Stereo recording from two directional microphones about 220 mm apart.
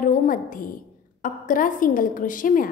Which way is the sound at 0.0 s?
35° left (ahead or behind).